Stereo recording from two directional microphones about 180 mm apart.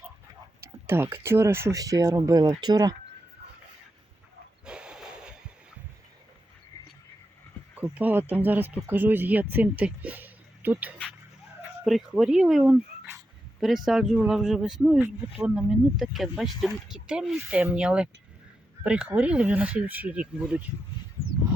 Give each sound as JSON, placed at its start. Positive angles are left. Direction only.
{"t": 0.6, "sound": "speech", "side_deg": -15}
{"t": 4.6, "sound": "a sound", "side_deg": -5}
{"t": 7.8, "sound": "speech", "side_deg": -10}